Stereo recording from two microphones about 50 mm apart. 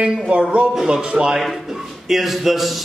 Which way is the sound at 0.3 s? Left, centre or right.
Right.